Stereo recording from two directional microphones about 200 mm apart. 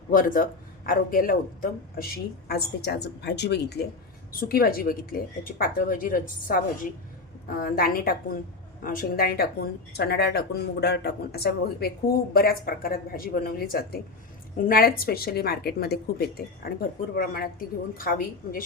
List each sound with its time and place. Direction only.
0.1 s speech: 45° left (ahead or behind)